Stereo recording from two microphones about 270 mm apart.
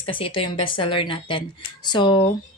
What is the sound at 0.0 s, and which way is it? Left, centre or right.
Speech, centre.